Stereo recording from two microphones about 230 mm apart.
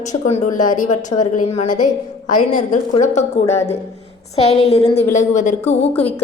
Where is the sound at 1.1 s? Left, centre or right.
Left.